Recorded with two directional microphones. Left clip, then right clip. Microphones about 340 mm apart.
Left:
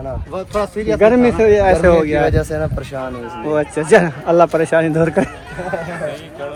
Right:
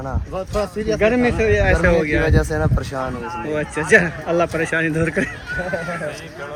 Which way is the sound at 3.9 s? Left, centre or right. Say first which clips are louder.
Left 4 dB; left.